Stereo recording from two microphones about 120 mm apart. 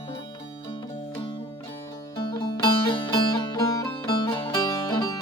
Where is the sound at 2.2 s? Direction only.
40° left (ahead or behind).